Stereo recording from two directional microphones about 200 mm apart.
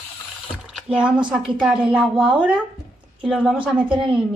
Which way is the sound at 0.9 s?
5° right (ahead or behind).